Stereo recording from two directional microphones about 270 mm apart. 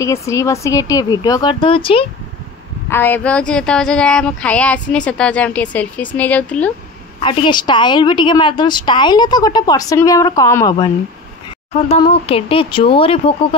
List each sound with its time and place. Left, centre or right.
0.0 s a woman's voice: centre
2.9 s speech: centre
7.2 s a woman's voice: centre